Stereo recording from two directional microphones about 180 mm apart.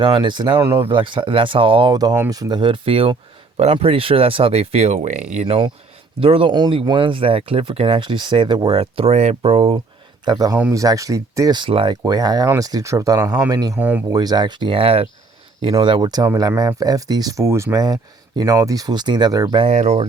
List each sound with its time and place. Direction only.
0.0 s speech: 25° right (ahead or behind)
10.2 s speech: 20° right (ahead or behind)
13.7 s speech: 10° right (ahead or behind)
14.1 s speech: 20° right (ahead or behind)
19.6 s speech: 40° right (ahead or behind)